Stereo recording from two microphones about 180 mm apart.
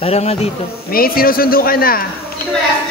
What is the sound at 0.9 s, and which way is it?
A man's voice, 55° left (ahead or behind).